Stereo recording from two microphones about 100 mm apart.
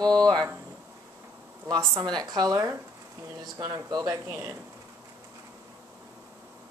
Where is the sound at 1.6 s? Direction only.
45° right (ahead or behind).